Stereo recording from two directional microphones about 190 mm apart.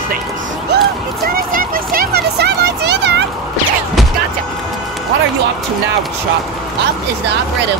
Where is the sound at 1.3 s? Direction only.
50° right (ahead or behind).